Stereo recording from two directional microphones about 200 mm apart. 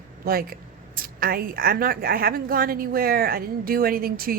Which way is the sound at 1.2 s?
45° right (ahead or behind).